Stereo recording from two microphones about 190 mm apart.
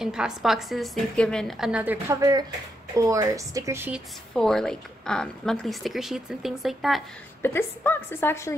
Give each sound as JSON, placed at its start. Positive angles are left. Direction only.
{"t": 0.0, "sound": "a woman's voice", "side_deg": -5}
{"t": 4.4, "sound": "a woman's voice", "side_deg": 0}
{"t": 7.4, "sound": "a woman's voice", "side_deg": 10}